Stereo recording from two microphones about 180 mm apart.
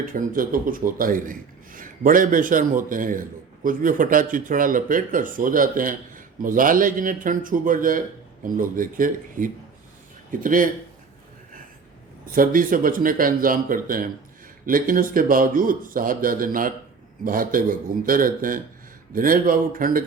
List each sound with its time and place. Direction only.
0.0 s speech: 50° right (ahead or behind)
12.3 s speech: 50° right (ahead or behind)